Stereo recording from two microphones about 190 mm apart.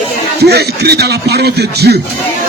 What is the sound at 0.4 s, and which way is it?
Music, 60° right (ahead or behind).